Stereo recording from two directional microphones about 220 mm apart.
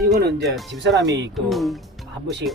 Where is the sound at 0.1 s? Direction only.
45° right (ahead or behind).